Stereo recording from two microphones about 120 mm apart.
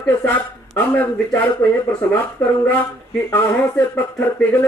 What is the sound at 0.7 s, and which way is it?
Speech, 15° left (ahead or behind).